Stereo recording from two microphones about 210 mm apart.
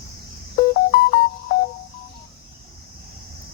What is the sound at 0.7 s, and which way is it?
Music, 40° left (ahead or behind).